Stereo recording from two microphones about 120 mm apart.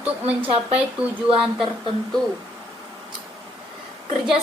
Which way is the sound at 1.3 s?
45° right (ahead or behind).